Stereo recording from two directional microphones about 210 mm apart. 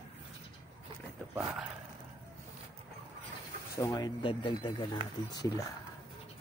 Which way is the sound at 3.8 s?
20° left (ahead or behind).